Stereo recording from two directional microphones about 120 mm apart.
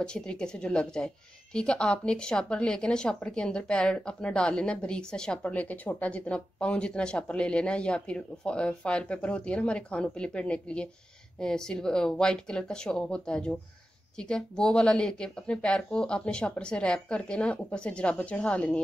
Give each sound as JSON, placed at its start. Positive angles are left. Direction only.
{"t": 0.0, "sound": "a woman's voice", "side_deg": 5}